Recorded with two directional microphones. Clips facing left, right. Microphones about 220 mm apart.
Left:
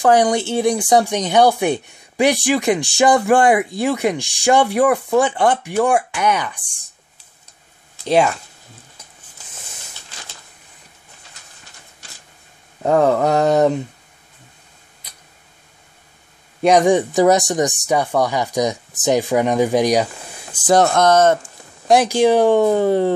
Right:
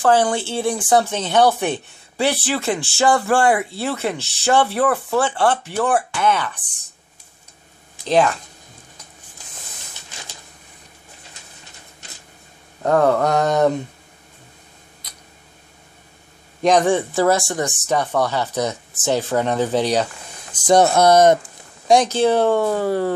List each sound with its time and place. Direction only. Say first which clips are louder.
0.0 s speech: left 2 dB; 15° left (ahead or behind)
8.1 s speech: left 1 dB; 10° left (ahead or behind)
12.8 s speech: left 1 dB; 10° left (ahead or behind)
16.6 s speech: left 3 dB; 10° left (ahead or behind)
20.6 s speech: even; centre (ahead or behind)
20.9 s speech: right 1 dB; 10° right (ahead or behind)
21.8 s speech: left 2 dB; 5° left (ahead or behind)